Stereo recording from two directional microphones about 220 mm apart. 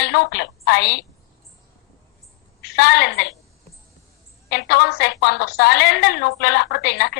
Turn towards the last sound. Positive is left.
turn(degrees=50)  # may be behind; listen again after turning